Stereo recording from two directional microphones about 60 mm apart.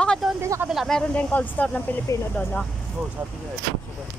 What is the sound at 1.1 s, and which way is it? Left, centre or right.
Speech, left.